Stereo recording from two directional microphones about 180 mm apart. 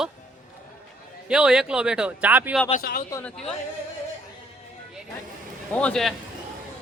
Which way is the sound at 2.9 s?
75° left (ahead or behind).